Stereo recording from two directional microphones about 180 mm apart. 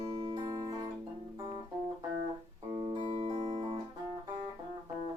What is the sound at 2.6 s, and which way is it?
Music, 30° right (ahead or behind).